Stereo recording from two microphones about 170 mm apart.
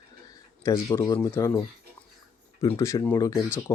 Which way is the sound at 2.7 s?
20° left (ahead or behind).